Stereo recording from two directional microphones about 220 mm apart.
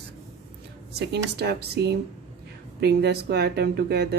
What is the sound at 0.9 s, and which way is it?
Speech, 50° right (ahead or behind).